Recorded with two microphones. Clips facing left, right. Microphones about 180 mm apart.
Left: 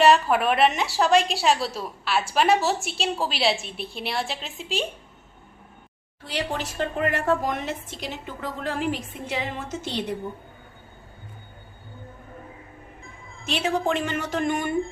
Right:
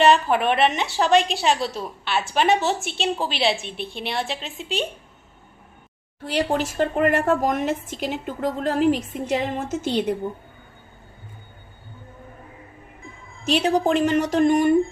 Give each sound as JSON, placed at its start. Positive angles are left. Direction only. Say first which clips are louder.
{"t": 0.0, "sound": "a woman's voice", "louder": "right 1 dB", "side_deg": 0}
{"t": 6.2, "sound": "a woman's voice", "louder": "right 6 dB", "side_deg": -50}
{"t": 13.4, "sound": "speech", "louder": "right 5 dB", "side_deg": -40}